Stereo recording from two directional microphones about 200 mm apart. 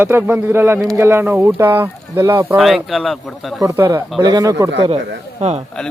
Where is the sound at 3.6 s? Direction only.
15° right (ahead or behind).